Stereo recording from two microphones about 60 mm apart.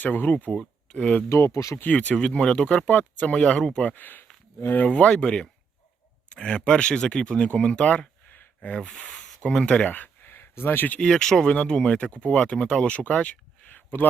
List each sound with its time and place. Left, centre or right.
0.0 s speech: left
1.3 s speech: left
2.0 s speech: centre
3.9 s speech: left
4.9 s speech: centre
8.3 s a sound: left
8.9 s speech: centre; by 11.0 s left
11.0 s speech: centre; by 14.1 s left